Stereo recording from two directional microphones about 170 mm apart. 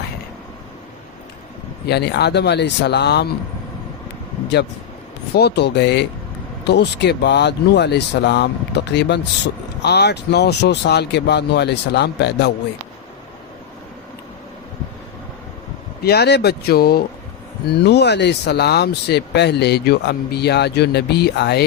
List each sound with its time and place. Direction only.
1.9 s speech: 80° left
5.3 s speech: 75° left (ahead or behind)
9.8 s speech: 75° left (ahead or behind)
16.0 s speech: 70° left (ahead or behind)
17.7 s speech: 80° left